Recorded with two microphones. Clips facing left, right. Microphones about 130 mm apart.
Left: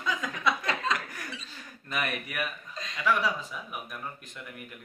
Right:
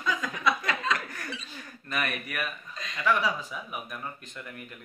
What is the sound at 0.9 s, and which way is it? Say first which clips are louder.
Speech: right 1 dB; 10° left (ahead or behind).